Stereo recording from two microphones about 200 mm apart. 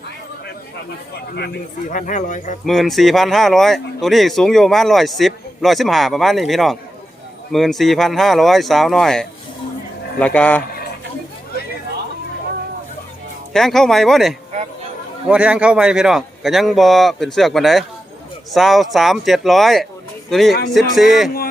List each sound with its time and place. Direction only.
1.9 s speech: 40° left (ahead or behind)
2.6 s a man's voice: centre (ahead or behind)
13.5 s speech: centre (ahead or behind)